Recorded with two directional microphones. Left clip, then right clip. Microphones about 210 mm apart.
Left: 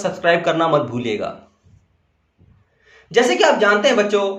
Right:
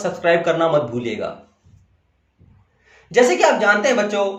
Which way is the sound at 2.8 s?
25° left (ahead or behind).